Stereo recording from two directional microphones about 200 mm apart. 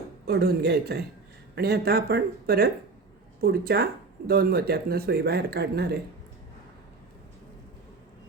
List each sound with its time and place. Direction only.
0.3 s speech: 55° right (ahead or behind)